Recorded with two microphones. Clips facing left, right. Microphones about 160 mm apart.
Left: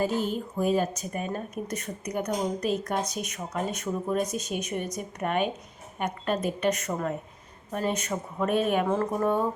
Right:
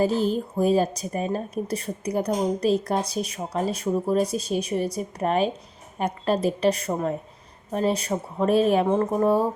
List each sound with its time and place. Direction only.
0.0 s a woman's voice: 35° right (ahead or behind)